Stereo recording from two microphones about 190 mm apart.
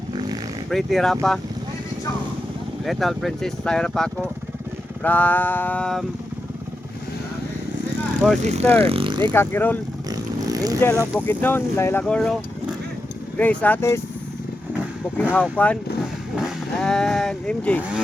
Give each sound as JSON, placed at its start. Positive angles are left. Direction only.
{"t": 0.7, "sound": "speech", "side_deg": 0}
{"t": 2.8, "sound": "speech", "side_deg": 0}
{"t": 8.4, "sound": "speech", "side_deg": -35}
{"t": 9.3, "sound": "speech", "side_deg": 10}
{"t": 10.1, "sound": "vehicle", "side_deg": -20}
{"t": 10.8, "sound": "speech", "side_deg": 15}
{"t": 15.2, "sound": "speech", "side_deg": 10}
{"t": 16.3, "sound": "vehicle", "side_deg": 0}